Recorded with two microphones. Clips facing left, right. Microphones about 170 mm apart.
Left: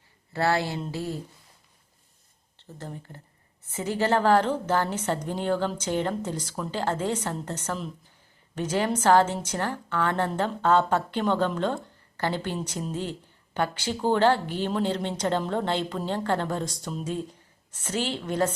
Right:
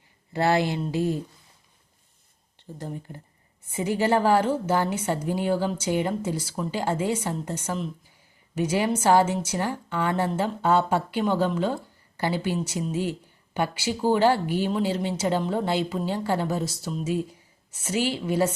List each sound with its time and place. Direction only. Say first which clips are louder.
0.3 s a woman's voice: right 3 dB; 15° right (ahead or behind)
2.6 s a woman's voice: right 4 dB; 15° right (ahead or behind)